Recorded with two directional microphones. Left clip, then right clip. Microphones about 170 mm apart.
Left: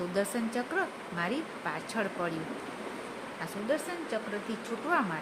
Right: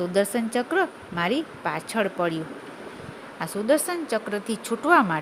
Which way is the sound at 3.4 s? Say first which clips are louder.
Right 10 dB; 75° right (ahead or behind).